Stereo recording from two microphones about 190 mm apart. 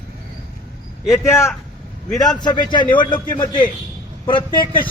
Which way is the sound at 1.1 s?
15° left (ahead or behind).